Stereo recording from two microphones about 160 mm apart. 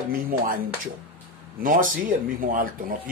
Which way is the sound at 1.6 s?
60° right (ahead or behind).